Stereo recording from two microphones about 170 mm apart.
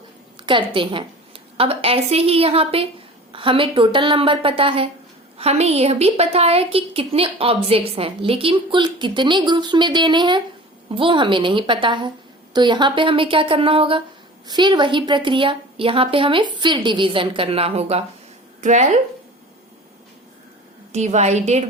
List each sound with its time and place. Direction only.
0.3 s a woman's voice: 30° right (ahead or behind); by 18.9 s 45° right (ahead or behind)
20.9 s a woman's voice: 40° right (ahead or behind)